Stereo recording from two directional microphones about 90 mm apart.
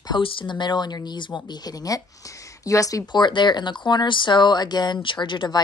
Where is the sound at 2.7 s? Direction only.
40° left (ahead or behind).